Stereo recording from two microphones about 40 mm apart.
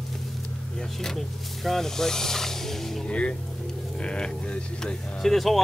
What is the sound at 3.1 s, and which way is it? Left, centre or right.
Speech, left.